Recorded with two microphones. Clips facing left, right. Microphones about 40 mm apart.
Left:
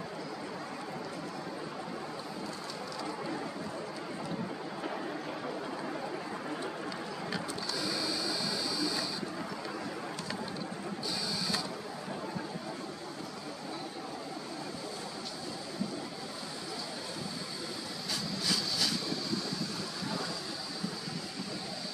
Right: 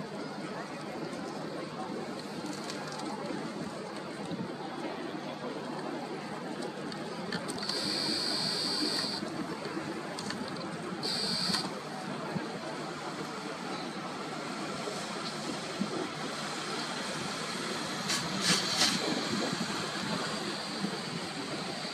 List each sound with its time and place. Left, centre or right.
18.1 s vehicle: right